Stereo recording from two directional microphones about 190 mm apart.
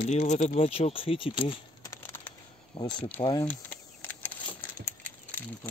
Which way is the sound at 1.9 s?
10° left (ahead or behind).